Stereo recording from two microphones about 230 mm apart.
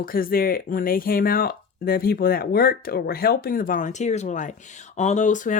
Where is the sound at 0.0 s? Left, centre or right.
Left.